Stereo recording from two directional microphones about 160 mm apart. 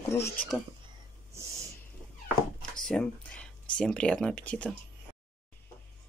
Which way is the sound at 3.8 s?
5° left (ahead or behind).